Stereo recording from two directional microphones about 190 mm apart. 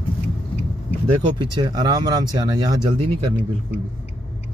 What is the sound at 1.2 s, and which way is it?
Speech, 25° right (ahead or behind).